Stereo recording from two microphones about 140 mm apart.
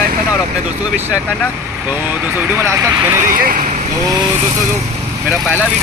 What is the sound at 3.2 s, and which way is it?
Speech, 80° right.